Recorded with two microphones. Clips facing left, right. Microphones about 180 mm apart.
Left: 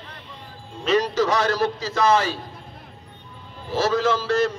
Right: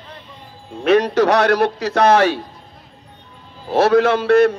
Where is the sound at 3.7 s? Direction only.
65° right (ahead or behind).